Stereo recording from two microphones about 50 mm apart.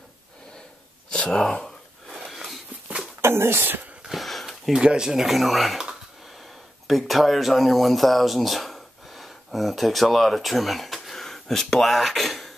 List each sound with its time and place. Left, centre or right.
1.3 s speech: centre
2.1 s a sound: centre
3.2 s speech: right
4.1 s a sound: centre
4.7 s speech: centre
6.9 s speech: centre